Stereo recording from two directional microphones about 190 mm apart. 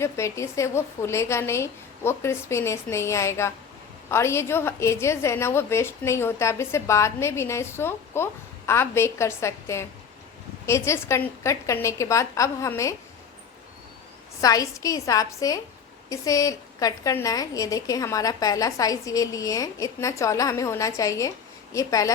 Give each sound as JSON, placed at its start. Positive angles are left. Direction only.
{"t": 0.0, "sound": "a woman's voice", "side_deg": 15}
{"t": 14.4, "sound": "a woman's voice", "side_deg": 20}